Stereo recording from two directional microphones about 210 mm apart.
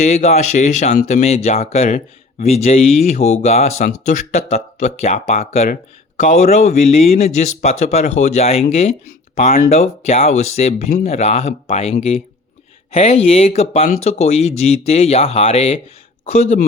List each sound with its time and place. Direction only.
0.0 s speech: 30° left (ahead or behind)